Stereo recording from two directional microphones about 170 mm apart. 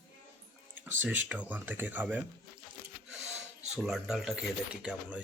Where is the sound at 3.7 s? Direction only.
5° right (ahead or behind).